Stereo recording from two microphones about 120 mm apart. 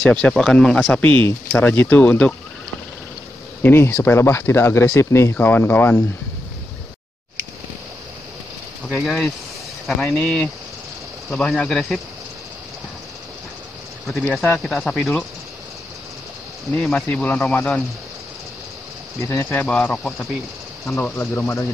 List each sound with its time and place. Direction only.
0.0 s speech: 5° left (ahead or behind)
3.6 s speech: 15° left (ahead or behind)
8.8 s speech: centre (ahead or behind)
14.5 s speech: centre (ahead or behind)
16.7 s speech: 5° left (ahead or behind)
19.2 s speech: 20° left (ahead or behind)
19.6 s speech: 10° left (ahead or behind)